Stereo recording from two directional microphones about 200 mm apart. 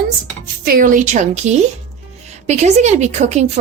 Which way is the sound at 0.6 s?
45° right (ahead or behind).